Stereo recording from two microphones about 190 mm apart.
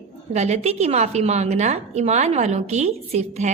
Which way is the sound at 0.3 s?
35° right (ahead or behind).